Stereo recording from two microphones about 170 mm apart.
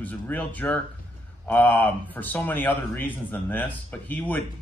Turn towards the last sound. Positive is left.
turn(degrees=10)  # may be behind; listen again after turning